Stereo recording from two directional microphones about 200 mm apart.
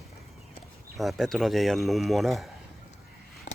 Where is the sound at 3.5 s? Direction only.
40° left (ahead or behind).